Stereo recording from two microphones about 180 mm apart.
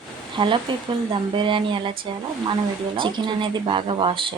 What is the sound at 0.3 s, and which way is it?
Speech, 25° right (ahead or behind).